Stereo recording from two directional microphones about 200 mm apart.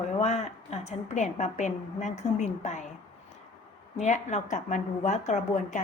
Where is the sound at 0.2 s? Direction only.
35° left (ahead or behind).